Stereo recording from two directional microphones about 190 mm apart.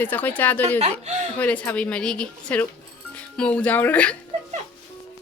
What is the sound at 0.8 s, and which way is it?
Speech, 35° right (ahead or behind).